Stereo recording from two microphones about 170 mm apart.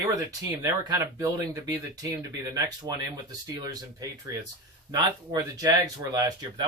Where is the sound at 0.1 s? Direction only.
20° right (ahead or behind).